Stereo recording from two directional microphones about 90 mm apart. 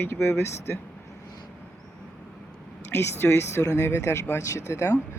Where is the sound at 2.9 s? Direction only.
25° left (ahead or behind).